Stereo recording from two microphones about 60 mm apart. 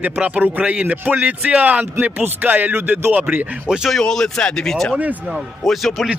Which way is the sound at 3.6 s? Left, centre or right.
Centre.